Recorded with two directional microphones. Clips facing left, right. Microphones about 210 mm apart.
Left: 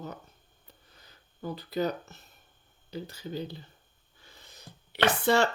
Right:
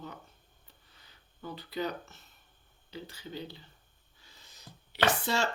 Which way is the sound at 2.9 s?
40° left (ahead or behind).